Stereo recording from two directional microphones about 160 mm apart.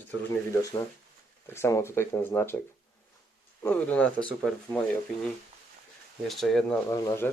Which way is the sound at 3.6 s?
10° left (ahead or behind).